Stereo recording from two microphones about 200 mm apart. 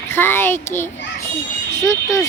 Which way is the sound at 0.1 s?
10° left (ahead or behind).